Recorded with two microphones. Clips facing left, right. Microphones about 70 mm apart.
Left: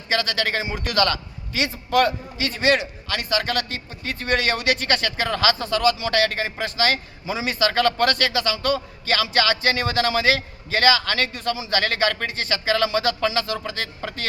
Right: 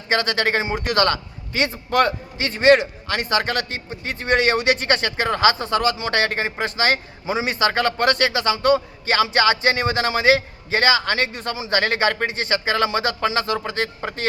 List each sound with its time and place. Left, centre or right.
0.1 s a man's voice: right